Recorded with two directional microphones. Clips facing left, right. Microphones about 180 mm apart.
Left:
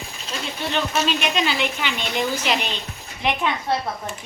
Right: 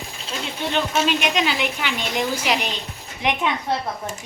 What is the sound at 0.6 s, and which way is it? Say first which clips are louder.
A woman's voice: right 2 dB; 15° right (ahead or behind).